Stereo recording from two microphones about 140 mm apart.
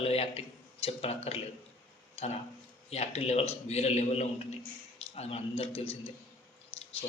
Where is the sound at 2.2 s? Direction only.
45° left (ahead or behind).